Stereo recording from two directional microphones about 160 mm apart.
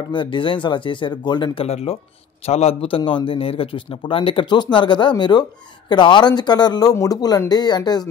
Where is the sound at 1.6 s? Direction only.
40° left (ahead or behind).